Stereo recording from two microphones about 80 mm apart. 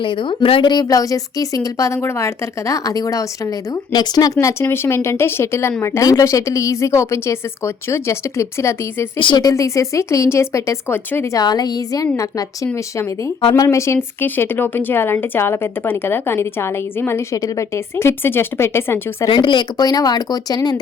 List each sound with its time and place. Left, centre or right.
0.0 s a woman's voice: left
0.3 s speech: left
2.0 s speech: left
4.7 s speech: left
9.1 s a woman's voice: left
9.4 s speech: left
11.3 s a woman's voice: left
17.3 s speech: left
19.3 s speech: left